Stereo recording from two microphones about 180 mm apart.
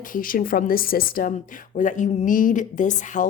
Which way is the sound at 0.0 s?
50° left (ahead or behind).